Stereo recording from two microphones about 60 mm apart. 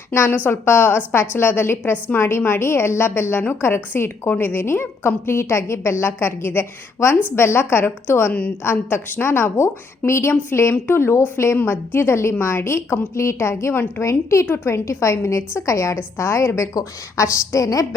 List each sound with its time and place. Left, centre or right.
0.1 s a woman's voice: left
8.3 s a woman's voice: left
8.6 s a woman's voice: left
16.7 s a woman's voice: left